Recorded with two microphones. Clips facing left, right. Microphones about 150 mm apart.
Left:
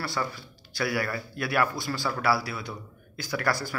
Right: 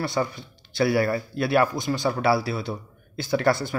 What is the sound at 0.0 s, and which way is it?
Speech, 20° right (ahead or behind).